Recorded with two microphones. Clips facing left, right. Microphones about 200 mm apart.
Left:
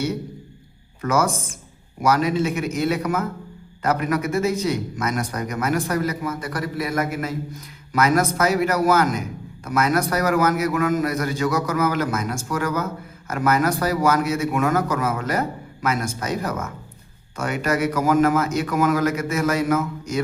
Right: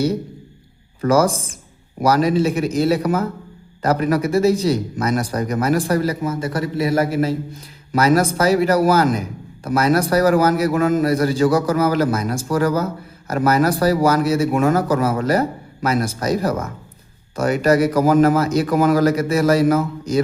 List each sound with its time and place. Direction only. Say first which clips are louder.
1.0 s a man's voice: right 5 dB; 35° right (ahead or behind)